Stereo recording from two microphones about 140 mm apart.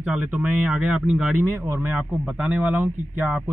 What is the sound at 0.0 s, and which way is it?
A man's voice, 10° right (ahead or behind).